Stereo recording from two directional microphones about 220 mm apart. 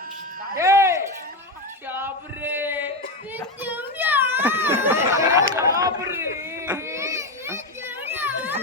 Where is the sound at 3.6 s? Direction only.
10° right (ahead or behind).